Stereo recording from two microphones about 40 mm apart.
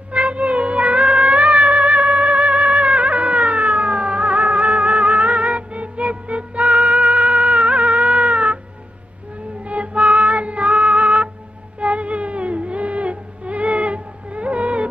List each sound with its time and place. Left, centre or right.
0.1 s music: right
9.7 s music: right